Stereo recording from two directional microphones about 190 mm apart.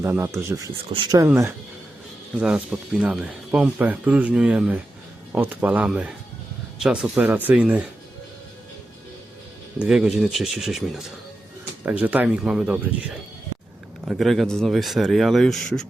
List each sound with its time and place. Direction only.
0.0 s speech: 15° right (ahead or behind)
0.7 s speech: 25° right (ahead or behind)
2.4 s speech: 5° right (ahead or behind)
9.8 s speech: 5° right (ahead or behind)